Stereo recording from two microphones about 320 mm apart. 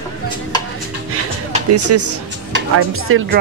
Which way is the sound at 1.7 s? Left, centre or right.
Right.